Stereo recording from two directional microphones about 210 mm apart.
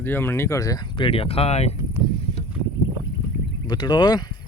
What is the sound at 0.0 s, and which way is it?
Speech, 10° left (ahead or behind).